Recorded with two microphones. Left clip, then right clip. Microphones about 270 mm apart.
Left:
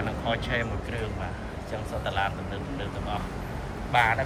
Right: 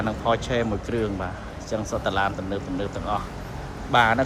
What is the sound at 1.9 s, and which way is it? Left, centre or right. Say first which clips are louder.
Speech: right 5 dB; right.